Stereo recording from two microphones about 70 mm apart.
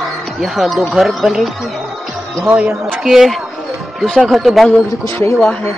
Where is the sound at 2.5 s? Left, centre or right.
Right.